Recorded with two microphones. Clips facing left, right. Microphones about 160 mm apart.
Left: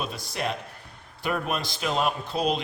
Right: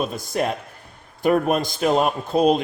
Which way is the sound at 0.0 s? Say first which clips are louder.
Right 7 dB; 45° right (ahead or behind).